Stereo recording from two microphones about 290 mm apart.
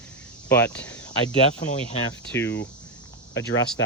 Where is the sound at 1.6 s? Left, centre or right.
Left.